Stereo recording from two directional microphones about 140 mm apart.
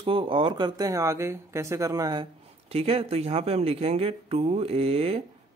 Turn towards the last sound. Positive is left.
turn(degrees=-45)  # may be behind; listen again after turning